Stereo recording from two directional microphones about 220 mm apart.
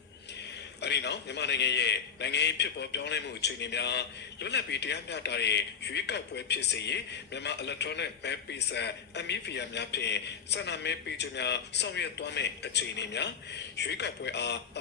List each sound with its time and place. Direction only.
0.8 s a man's voice: 50° left (ahead or behind)